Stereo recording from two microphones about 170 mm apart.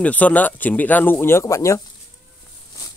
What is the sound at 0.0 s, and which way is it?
Speech, 10° left (ahead or behind).